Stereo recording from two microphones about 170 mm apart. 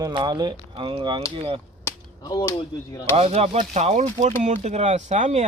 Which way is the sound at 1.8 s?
20° left (ahead or behind).